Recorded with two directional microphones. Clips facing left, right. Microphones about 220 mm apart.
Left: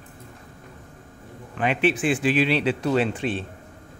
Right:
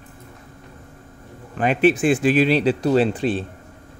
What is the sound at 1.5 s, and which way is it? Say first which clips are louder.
Speech: right 5 dB; 40° right (ahead or behind).